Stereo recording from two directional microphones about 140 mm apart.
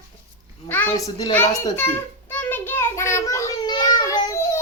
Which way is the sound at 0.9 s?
25° left (ahead or behind).